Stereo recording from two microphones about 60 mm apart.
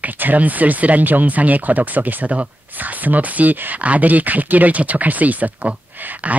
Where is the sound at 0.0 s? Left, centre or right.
Right.